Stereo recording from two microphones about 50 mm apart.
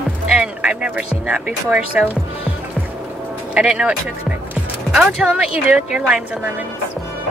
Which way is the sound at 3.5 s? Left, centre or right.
Right.